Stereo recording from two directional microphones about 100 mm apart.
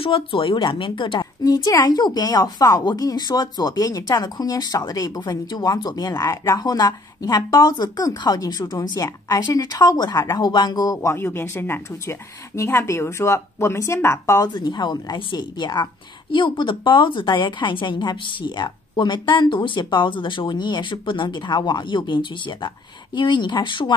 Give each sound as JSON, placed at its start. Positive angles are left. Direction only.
{"t": 0.0, "sound": "speech", "side_deg": 60}
{"t": 1.4, "sound": "speech", "side_deg": 40}
{"t": 14.5, "sound": "a woman's voice", "side_deg": 45}